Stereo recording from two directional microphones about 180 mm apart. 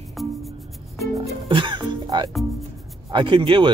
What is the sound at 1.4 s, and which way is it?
Music, 25° right (ahead or behind).